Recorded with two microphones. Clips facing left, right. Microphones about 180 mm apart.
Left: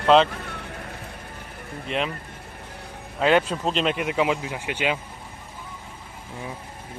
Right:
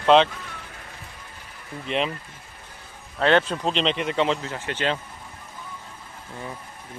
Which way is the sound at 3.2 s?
10° left (ahead or behind).